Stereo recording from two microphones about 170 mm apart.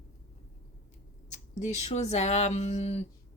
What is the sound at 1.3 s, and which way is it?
A woman's voice, 45° left (ahead or behind).